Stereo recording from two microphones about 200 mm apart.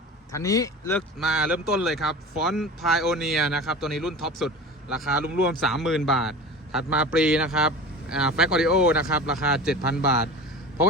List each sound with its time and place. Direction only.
0.3 s speech: 15° left (ahead or behind)
0.9 s speech: centre (ahead or behind)